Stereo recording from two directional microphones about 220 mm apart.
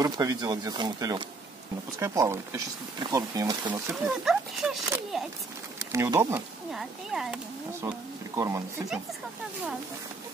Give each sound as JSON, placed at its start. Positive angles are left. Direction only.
{"t": 0.0, "sound": "speech", "side_deg": -15}
{"t": 3.9, "sound": "speech", "side_deg": 0}
{"t": 5.1, "sound": "a sound", "side_deg": 0}
{"t": 5.9, "sound": "speech", "side_deg": -15}
{"t": 6.7, "sound": "speech", "side_deg": 0}